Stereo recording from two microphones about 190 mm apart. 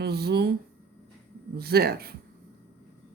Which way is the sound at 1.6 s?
55° right (ahead or behind).